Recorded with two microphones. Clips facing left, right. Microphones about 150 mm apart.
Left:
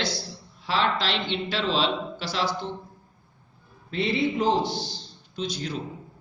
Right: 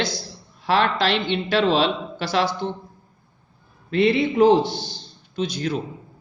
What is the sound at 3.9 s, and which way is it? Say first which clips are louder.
Speech: right 6 dB; 65° right (ahead or behind).